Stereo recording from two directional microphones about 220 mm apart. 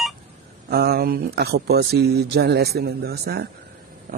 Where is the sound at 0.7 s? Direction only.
45° right (ahead or behind).